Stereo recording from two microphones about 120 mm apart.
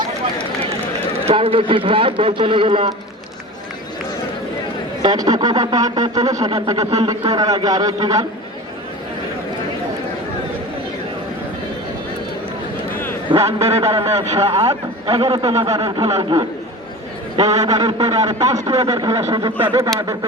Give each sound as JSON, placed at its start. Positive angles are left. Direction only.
{"t": 1.2, "sound": "a man's voice", "side_deg": -50}
{"t": 5.0, "sound": "a man's voice", "side_deg": -35}
{"t": 13.6, "sound": "a man's voice", "side_deg": -65}
{"t": 13.8, "sound": "a man's voice", "side_deg": -30}
{"t": 15.0, "sound": "a man's voice", "side_deg": -50}
{"t": 15.6, "sound": "a man's voice", "side_deg": -30}
{"t": 16.0, "sound": "a man's voice", "side_deg": -55}
{"t": 17.4, "sound": "a man's voice", "side_deg": -30}
{"t": 19.5, "sound": "speech", "side_deg": -15}